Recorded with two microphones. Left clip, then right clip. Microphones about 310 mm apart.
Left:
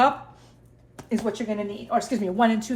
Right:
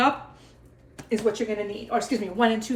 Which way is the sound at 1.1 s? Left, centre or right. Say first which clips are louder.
Right 3 dB; centre.